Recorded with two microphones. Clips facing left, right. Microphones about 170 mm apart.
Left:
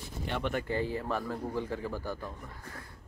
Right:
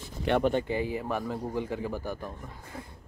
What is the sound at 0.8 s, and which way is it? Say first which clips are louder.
Speech: right 2 dB; 15° right (ahead or behind).